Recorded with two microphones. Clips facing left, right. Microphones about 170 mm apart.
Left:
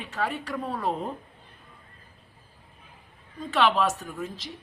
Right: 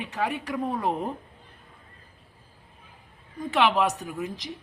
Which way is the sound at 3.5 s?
15° right (ahead or behind).